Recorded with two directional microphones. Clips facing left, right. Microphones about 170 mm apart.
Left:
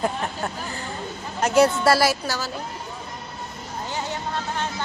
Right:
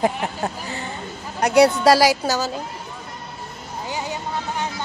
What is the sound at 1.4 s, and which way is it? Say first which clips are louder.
Speech: right 3 dB; 15° right (ahead or behind).